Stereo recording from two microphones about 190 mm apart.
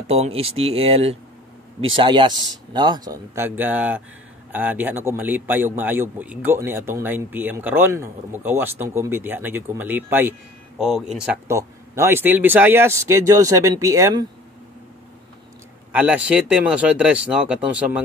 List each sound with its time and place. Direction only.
0.1 s a man's voice: 30° right (ahead or behind); by 11.3 s 5° right (ahead or behind)
11.4 s a man's voice: 15° right (ahead or behind)
15.9 s a man's voice: 5° right (ahead or behind)